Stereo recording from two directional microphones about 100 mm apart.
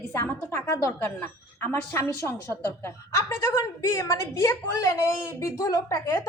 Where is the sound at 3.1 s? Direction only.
30° left (ahead or behind).